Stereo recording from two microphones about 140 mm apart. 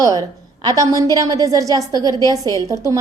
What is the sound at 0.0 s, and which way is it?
A woman's voice, 25° right (ahead or behind).